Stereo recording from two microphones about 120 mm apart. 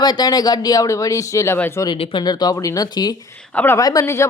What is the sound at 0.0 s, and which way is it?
Speech, 35° left (ahead or behind).